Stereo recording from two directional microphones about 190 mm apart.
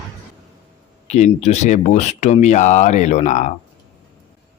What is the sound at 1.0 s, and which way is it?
Speech, 35° left (ahead or behind).